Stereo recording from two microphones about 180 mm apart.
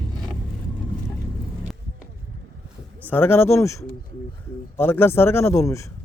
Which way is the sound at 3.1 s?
10° left (ahead or behind).